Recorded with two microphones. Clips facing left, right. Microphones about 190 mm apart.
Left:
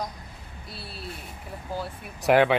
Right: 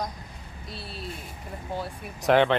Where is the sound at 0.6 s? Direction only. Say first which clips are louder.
Right 2 dB; 5° left (ahead or behind).